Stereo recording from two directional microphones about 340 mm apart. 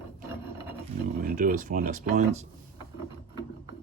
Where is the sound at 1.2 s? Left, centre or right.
Right.